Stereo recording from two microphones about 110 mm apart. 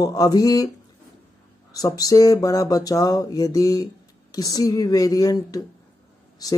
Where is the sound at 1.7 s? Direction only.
35° left (ahead or behind).